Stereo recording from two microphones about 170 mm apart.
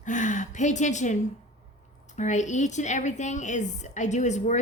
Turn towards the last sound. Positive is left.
turn(degrees=45)  # may be behind; listen again after turning